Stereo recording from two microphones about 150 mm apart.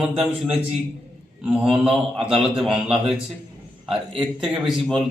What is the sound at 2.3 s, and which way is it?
Speech, 35° right (ahead or behind).